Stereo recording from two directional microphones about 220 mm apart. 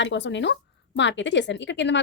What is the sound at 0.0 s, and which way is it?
A woman's voice, 55° left (ahead or behind).